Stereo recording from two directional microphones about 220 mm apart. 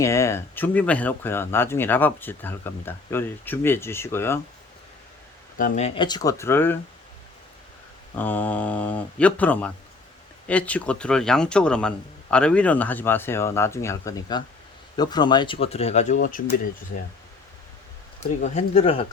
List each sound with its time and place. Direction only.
0.0 s speech: 15° left (ahead or behind)
5.5 s speech: 35° left (ahead or behind); by 6.7 s 10° left (ahead or behind)
8.1 s speech: 10° left (ahead or behind); by 16.6 s 40° left (ahead or behind)
18.2 s speech: 30° left (ahead or behind)